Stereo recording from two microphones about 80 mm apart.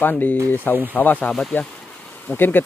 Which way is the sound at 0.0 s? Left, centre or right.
Left.